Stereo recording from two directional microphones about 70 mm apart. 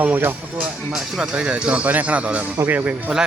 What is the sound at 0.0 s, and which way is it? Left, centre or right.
Speech, right.